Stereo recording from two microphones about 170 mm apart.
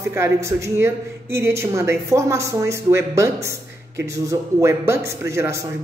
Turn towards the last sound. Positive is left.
turn(degrees=-15)  # may be behind; listen again after turning